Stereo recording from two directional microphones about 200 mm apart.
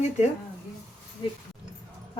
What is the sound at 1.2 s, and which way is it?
Speech, 25° left (ahead or behind).